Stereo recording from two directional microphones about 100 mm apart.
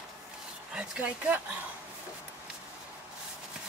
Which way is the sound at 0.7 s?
15° right (ahead or behind).